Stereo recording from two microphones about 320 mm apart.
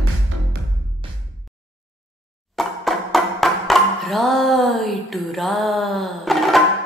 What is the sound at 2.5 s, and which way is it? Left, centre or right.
Music, centre.